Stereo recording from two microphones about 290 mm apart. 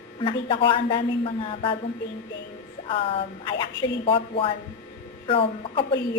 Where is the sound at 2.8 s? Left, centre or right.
Centre.